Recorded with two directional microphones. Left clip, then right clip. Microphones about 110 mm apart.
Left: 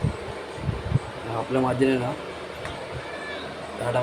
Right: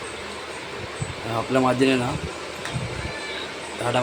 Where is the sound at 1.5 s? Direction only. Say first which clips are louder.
Right 3 dB; 20° right (ahead or behind).